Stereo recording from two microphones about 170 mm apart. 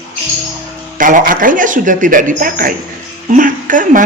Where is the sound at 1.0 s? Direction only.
50° right (ahead or behind).